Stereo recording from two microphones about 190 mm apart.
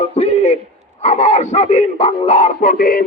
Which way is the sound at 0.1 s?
35° left (ahead or behind).